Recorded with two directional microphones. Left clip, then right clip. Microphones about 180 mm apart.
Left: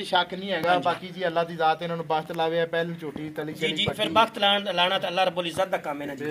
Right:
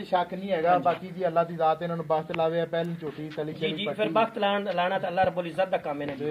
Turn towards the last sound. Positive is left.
turn(degrees=-5)  # may be behind; listen again after turning